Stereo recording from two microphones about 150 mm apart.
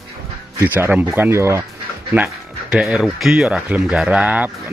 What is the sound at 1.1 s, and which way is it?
Speech, 15° right (ahead or behind).